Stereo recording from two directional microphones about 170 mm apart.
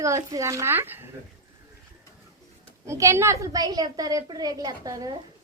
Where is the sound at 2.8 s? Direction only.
15° right (ahead or behind).